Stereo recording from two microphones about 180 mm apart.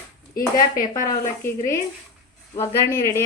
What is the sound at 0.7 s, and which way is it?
Speech, 50° left (ahead or behind).